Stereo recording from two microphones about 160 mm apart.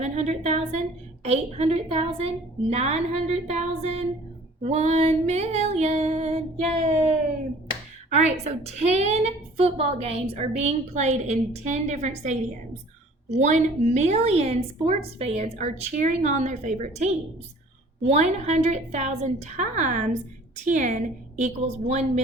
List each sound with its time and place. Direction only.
0.0 s a woman's voice: 45° right (ahead or behind)
8.1 s a woman's voice: 45° right (ahead or behind)